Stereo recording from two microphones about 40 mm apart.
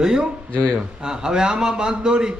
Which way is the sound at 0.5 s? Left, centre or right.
Left.